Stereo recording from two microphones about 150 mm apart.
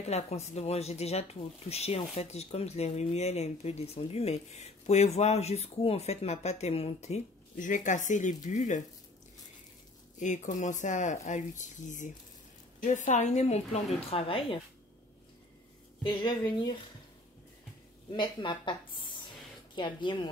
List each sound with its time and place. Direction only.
0.1 s speech: 45° left (ahead or behind)
10.1 s speech: 55° left (ahead or behind)
14.1 s speech: 35° left (ahead or behind)
16.1 s speech: 30° left (ahead or behind)
18.1 s speech: 30° left (ahead or behind)